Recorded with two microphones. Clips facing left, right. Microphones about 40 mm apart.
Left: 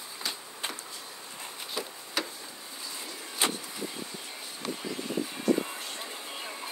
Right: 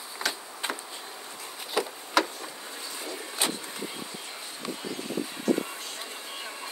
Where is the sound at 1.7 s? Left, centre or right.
Right.